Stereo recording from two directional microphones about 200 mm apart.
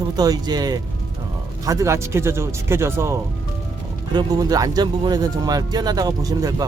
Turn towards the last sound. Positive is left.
turn(degrees=-20)  # may be behind; listen again after turning